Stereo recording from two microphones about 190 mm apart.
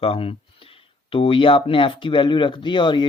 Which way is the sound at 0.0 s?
30° left (ahead or behind).